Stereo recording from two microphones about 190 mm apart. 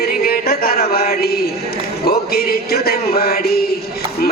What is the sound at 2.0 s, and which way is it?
Music, 55° left (ahead or behind).